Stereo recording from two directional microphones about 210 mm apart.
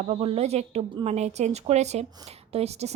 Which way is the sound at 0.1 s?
30° right (ahead or behind).